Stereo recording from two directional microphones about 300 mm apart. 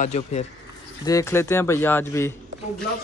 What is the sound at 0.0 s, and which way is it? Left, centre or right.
Speech, left.